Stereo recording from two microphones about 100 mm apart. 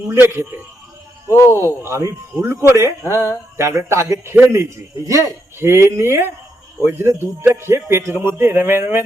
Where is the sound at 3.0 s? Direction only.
30° left (ahead or behind).